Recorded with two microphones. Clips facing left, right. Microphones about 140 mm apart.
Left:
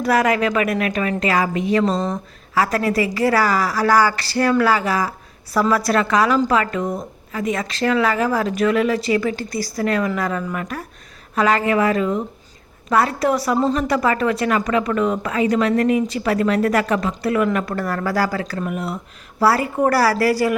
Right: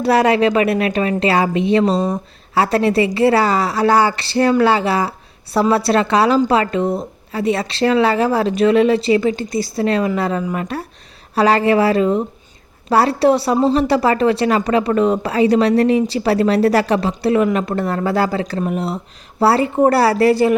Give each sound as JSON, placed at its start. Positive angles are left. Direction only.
{"t": 0.0, "sound": "a woman's voice", "side_deg": -30}